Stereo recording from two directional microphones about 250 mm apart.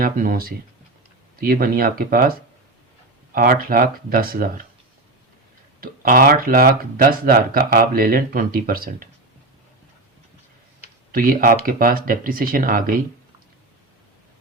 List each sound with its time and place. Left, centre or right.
0.0 s speech: right
5.8 s speech: right
11.1 s speech: right